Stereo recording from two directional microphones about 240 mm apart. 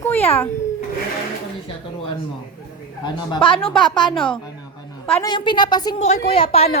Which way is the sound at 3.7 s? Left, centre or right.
Centre.